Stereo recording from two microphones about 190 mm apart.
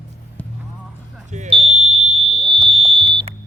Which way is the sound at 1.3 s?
35° right (ahead or behind).